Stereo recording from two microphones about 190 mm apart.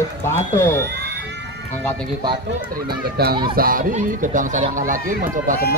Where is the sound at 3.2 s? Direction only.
55° right (ahead or behind).